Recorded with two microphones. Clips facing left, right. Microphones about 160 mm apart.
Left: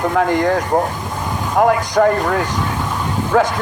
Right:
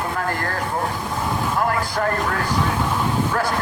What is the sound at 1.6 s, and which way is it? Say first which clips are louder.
Speech: left 12 dB; 65° left (ahead or behind).